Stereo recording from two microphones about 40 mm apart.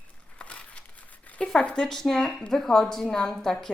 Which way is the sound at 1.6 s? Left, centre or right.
Left.